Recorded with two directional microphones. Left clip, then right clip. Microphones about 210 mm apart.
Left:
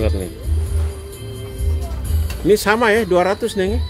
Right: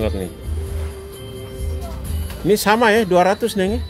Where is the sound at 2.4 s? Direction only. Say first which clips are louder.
Even; 10° right (ahead or behind).